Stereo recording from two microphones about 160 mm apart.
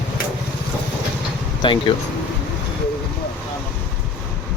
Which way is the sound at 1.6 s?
30° left (ahead or behind).